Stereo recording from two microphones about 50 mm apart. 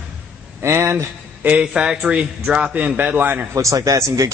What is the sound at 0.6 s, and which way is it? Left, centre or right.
Speech, right.